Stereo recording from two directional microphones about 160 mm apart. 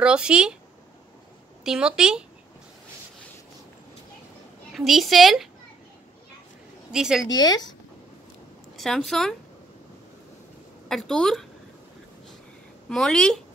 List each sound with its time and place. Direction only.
0.0 s a woman's voice: 5° right (ahead or behind)
1.6 s a woman's voice: 5° right (ahead or behind)
4.7 s a woman's voice: centre (ahead or behind)
6.9 s a woman's voice: 5° right (ahead or behind)
7.2 s speech: 25° left (ahead or behind)
8.7 s speech: centre (ahead or behind)
10.9 s a woman's voice: 5° left (ahead or behind)
12.9 s a woman's voice: 5° left (ahead or behind)